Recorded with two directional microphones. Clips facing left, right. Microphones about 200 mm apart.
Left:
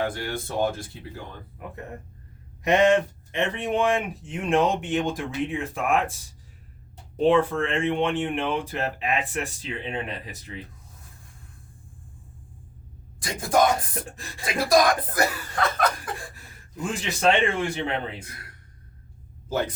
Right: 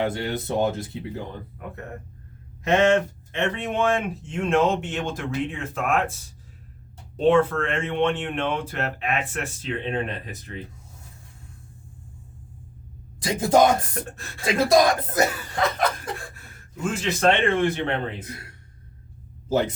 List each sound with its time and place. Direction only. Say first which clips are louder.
0.0 s speech: right 3 dB; 20° right (ahead or behind)
2.6 s speech: even; 15° left (ahead or behind)
7.3 s speech: right 2 dB; 15° left (ahead or behind)
13.2 s speech: right 4 dB; 25° right (ahead or behind)
16.8 s speech: right 2 dB; 15° left (ahead or behind)
19.5 s a man's voice: right 4 dB; 25° right (ahead or behind)